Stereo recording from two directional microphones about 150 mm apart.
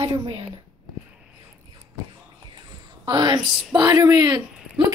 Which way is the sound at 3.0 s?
30° right (ahead or behind).